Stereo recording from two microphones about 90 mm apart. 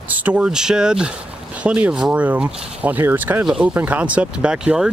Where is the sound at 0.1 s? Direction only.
15° right (ahead or behind).